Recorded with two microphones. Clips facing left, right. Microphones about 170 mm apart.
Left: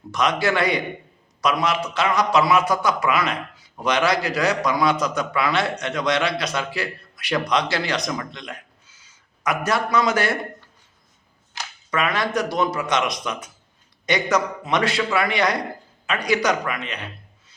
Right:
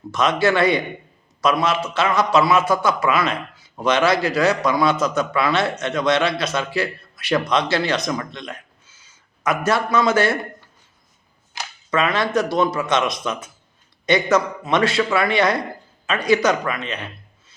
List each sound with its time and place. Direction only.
0.1 s a man's voice: 15° left (ahead or behind)
11.6 s a sound: 10° right (ahead or behind)
11.9 s a man's voice: 15° left (ahead or behind)